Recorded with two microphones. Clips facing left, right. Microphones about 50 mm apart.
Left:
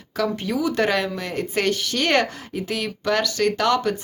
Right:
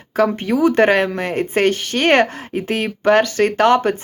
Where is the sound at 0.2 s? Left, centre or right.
Right.